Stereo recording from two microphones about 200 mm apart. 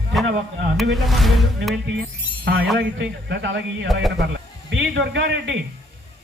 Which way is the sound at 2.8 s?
65° right (ahead or behind).